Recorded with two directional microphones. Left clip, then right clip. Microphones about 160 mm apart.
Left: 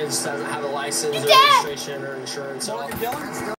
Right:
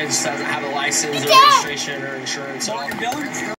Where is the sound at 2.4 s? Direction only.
20° right (ahead or behind).